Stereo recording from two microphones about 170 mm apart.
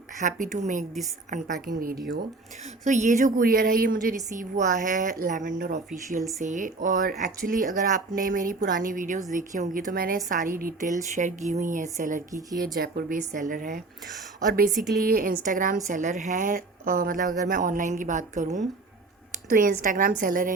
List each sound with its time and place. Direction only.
0.2 s a woman's voice: 50° right (ahead or behind)
2.8 s speech: 45° right (ahead or behind)
5.5 s speech: 75° right (ahead or behind)
5.7 s speech: 45° right (ahead or behind)
12.7 s a woman's voice: 60° right (ahead or behind)
14.7 s a woman's voice: centre (ahead or behind)
15.0 s speech: 55° right (ahead or behind)